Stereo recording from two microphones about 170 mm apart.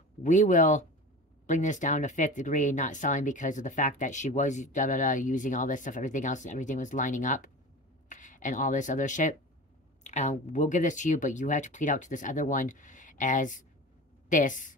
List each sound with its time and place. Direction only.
0.2 s speech: 45° left (ahead or behind)